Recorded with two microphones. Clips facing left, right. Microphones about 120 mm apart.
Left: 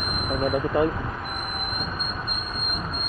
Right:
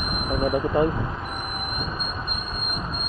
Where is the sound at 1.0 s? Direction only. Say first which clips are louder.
Right 1 dB; 20° right (ahead or behind).